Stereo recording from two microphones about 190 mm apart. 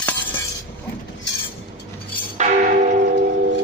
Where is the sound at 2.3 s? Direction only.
40° right (ahead or behind).